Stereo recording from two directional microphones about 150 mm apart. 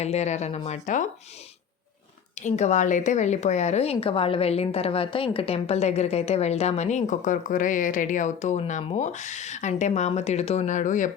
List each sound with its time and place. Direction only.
0.0 s speech: 45° left (ahead or behind)
2.4 s speech: 50° left (ahead or behind)